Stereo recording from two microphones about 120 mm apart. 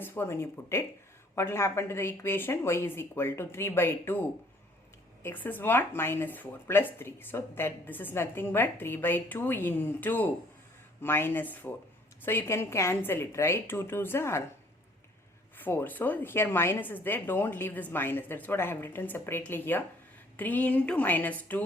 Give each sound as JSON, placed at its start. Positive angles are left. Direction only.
{"t": 0.0, "sound": "speech", "side_deg": 20}
{"t": 5.2, "sound": "speech", "side_deg": 15}
{"t": 15.5, "sound": "speech", "side_deg": 15}